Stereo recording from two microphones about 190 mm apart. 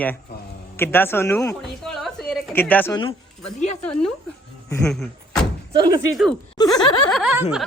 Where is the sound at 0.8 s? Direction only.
10° left (ahead or behind).